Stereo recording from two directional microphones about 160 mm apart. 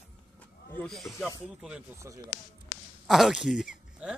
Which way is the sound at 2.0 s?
15° right (ahead or behind).